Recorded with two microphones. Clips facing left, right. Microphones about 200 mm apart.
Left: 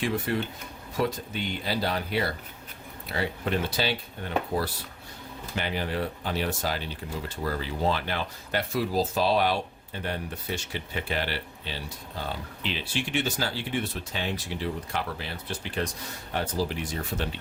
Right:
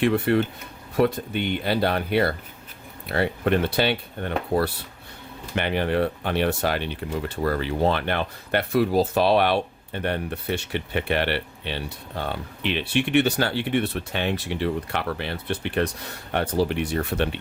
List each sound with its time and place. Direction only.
0.3 s speech: 60° right (ahead or behind)